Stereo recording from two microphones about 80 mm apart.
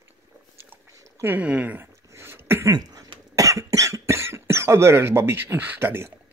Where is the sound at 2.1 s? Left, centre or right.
Right.